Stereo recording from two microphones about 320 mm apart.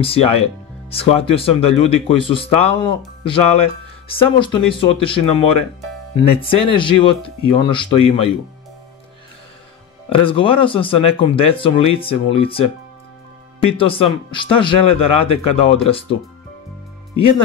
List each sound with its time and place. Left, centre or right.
0.0 s speech: centre
10.0 s speech: centre